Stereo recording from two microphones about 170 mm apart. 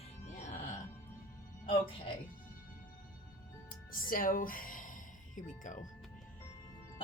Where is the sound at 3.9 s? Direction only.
55° left (ahead or behind).